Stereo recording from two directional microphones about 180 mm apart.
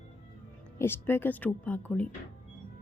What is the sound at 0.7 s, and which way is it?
Speech, 15° left (ahead or behind).